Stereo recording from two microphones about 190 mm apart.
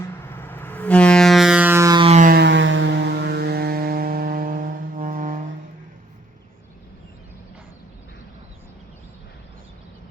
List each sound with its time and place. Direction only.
0.0 s vehicle: 10° left (ahead or behind); by 2.0 s 20° right (ahead or behind)
2.0 s a sound: 40° right (ahead or behind)
2.3 s vehicle: 65° right (ahead or behind); by 5.4 s 45° right (ahead or behind)